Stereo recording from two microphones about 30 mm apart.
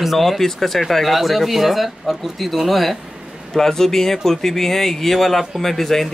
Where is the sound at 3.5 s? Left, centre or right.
Centre.